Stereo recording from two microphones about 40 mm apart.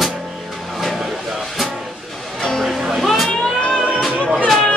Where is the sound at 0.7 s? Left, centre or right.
Centre.